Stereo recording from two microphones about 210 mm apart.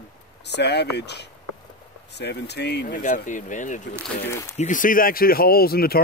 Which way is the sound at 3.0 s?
35° left (ahead or behind).